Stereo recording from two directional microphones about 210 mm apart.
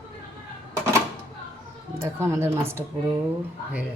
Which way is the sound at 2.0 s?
15° right (ahead or behind).